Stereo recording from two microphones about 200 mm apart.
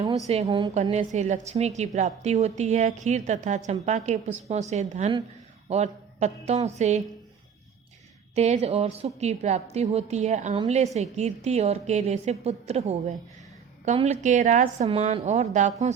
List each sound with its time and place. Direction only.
0.4 s a woman's voice: 20° right (ahead or behind)
0.7 s a woman's voice: 35° right (ahead or behind)
8.4 s a woman's voice: 35° right (ahead or behind)